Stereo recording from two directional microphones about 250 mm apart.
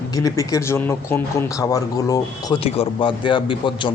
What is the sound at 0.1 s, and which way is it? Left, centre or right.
A man's voice, centre.